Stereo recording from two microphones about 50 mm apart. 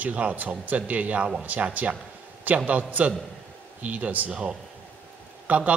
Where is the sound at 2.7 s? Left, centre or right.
Right.